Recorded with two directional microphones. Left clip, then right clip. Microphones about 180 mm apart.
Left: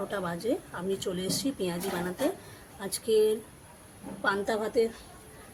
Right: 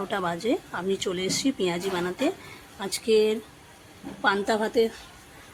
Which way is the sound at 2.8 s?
35° right (ahead or behind).